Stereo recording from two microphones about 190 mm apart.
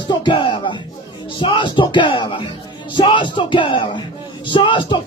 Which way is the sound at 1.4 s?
25° left (ahead or behind).